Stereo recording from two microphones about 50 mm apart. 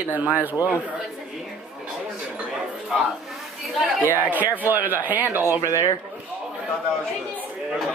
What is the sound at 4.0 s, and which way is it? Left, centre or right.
Speech, right.